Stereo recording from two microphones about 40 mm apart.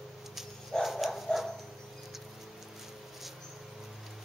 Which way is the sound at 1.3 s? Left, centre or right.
Centre.